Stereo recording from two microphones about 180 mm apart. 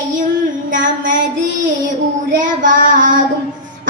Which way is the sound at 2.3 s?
45° right (ahead or behind).